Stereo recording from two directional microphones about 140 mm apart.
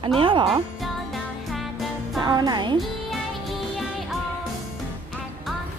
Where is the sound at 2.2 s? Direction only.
30° right (ahead or behind).